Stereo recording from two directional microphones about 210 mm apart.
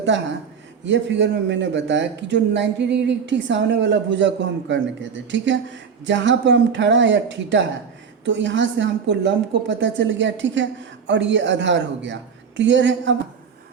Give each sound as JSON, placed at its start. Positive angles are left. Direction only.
{"t": 0.9, "sound": "a woman's voice", "side_deg": -60}